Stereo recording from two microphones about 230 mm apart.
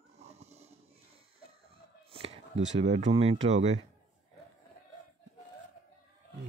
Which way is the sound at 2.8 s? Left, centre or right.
Right.